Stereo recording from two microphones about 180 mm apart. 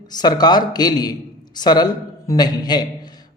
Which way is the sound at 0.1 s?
20° left (ahead or behind).